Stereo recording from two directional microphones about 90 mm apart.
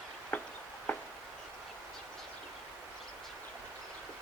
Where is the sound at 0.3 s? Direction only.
15° left (ahead or behind).